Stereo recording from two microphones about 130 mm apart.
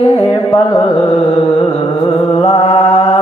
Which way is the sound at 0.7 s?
40° left (ahead or behind).